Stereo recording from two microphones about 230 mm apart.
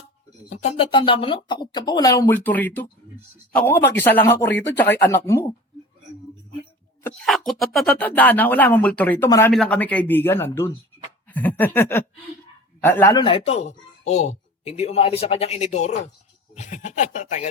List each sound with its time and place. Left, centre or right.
0.5 s speech: left; by 5.5 s centre
7.0 s speech: centre; by 17.5 s left